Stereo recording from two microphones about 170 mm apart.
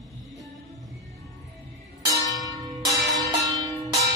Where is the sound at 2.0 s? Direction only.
20° right (ahead or behind).